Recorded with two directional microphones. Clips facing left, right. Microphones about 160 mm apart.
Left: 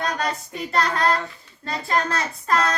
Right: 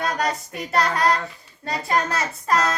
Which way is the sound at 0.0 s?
Centre (ahead or behind).